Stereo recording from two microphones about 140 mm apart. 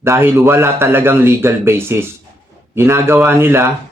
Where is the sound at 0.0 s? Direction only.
15° right (ahead or behind).